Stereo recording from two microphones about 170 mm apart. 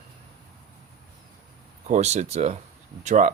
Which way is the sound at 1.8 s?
40° right (ahead or behind).